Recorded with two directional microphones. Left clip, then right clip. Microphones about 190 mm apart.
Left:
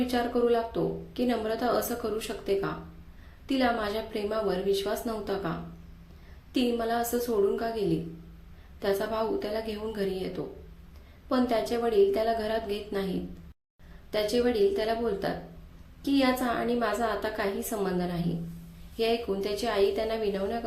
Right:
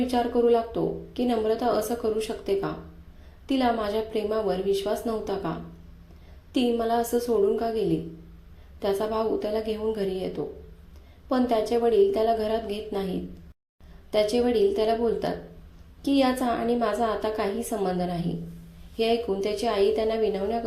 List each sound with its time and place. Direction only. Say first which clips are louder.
0.0 s a woman's voice: right 4 dB; 10° right (ahead or behind)
14.1 s a woman's voice: right 4 dB; 15° right (ahead or behind)